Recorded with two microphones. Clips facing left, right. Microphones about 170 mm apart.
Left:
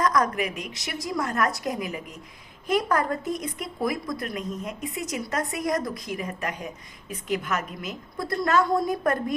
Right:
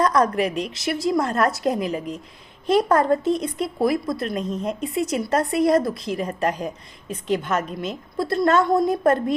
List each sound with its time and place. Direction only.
0.0 s speech: 30° right (ahead or behind)